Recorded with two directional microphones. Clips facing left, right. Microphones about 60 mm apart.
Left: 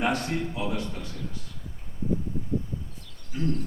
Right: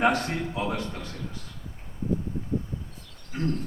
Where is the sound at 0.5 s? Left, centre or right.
Right.